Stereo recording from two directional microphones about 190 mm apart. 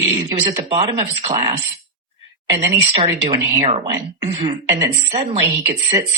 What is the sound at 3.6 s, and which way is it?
Speech, 35° right (ahead or behind).